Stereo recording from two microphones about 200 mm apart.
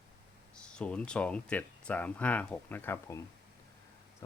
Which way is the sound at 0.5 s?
5° left (ahead or behind).